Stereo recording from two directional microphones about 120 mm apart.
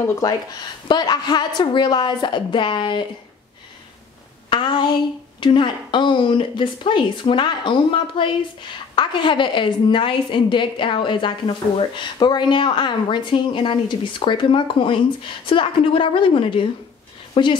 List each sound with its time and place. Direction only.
0.8 s a woman's voice: 35° left (ahead or behind)
4.5 s a sound: 40° left (ahead or behind)
5.4 s a woman's voice: 45° left (ahead or behind)